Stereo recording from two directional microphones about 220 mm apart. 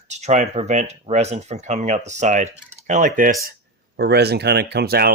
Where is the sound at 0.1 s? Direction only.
30° right (ahead or behind).